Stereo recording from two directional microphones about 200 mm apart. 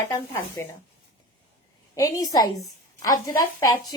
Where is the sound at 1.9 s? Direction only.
15° left (ahead or behind).